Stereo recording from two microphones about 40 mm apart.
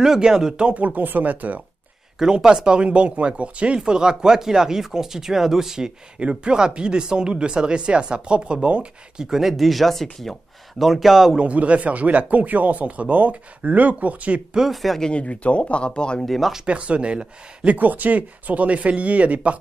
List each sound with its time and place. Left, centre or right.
0.0 s speech: centre
0.7 s speech: right
2.1 s speech: centre
6.1 s speech: right
9.2 s speech: centre
11.3 s speech: right
14.7 s speech: centre
15.0 s speech: left
15.2 s speech: left
16.3 s speech: centre
16.6 s speech: right
17.7 s speech: right